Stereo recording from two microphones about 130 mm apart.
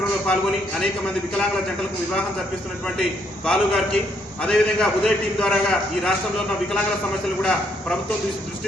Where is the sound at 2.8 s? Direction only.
5° left (ahead or behind).